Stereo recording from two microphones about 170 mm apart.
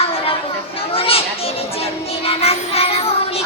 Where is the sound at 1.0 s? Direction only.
35° left (ahead or behind).